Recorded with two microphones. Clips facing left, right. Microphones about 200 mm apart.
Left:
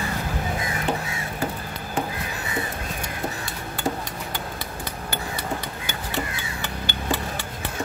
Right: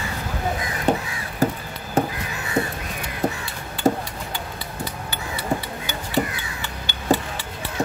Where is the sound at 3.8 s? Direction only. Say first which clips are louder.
Right 7 dB; 40° right (ahead or behind).